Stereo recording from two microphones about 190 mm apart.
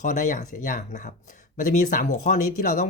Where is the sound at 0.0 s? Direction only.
40° left (ahead or behind).